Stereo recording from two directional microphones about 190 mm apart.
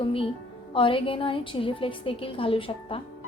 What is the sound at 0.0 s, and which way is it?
Speech, 30° left (ahead or behind).